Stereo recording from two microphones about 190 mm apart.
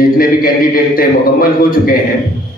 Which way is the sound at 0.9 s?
50° left (ahead or behind).